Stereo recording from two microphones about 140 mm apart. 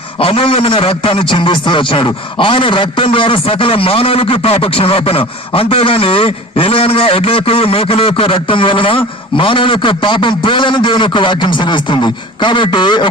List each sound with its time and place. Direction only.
0.2 s a man's voice: 40° left (ahead or behind)